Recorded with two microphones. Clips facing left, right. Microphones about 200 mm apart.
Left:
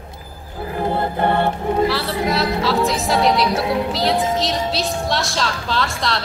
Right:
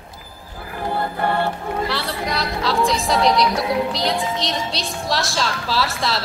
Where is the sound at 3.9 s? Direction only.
5° left (ahead or behind).